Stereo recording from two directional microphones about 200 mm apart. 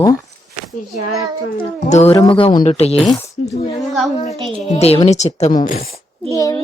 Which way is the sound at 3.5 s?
30° left (ahead or behind).